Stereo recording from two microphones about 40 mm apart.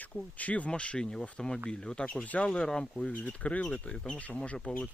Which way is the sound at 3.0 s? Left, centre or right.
Left.